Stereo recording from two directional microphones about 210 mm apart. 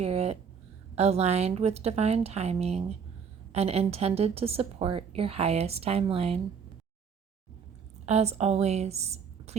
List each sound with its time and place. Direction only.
0.0 s a sound: 30° right (ahead or behind)
0.9 s a woman's voice: 30° right (ahead or behind)
8.0 s a woman's voice: 30° right (ahead or behind)